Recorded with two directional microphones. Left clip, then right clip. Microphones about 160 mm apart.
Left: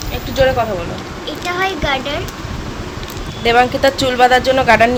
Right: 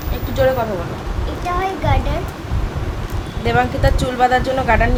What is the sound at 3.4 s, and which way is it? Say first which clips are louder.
Speech: left 5 dB; 40° left (ahead or behind).